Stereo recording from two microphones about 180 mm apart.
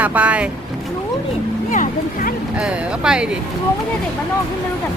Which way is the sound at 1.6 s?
45° left (ahead or behind).